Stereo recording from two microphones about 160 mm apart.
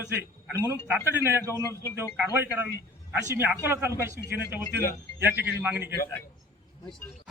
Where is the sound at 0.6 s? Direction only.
15° right (ahead or behind).